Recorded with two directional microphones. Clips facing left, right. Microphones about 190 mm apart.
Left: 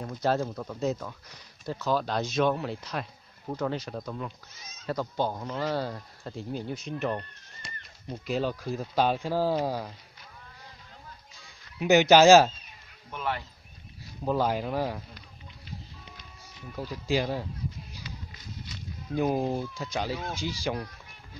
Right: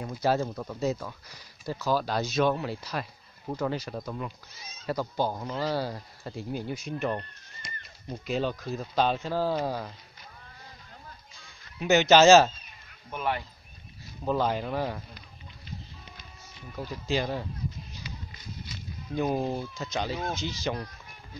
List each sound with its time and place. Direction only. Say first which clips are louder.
0.0 s speech: right 1 dB; 10° right (ahead or behind); by 9.9 s 10° left (ahead or behind)
11.8 s speech: left 1 dB; 10° left (ahead or behind)
13.1 s speech: right 2 dB; 15° right (ahead or behind)
14.2 s speech: even; 10° left (ahead or behind)
16.7 s speech: left 1 dB; 10° left (ahead or behind)
17.9 s a sound: right 1 dB; 5° left (ahead or behind)
20.3 s speech: even; 10° left (ahead or behind)